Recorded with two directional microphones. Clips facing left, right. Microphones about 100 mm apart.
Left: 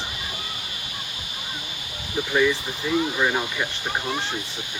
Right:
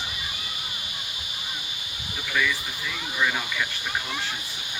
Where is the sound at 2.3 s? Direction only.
30° left (ahead or behind).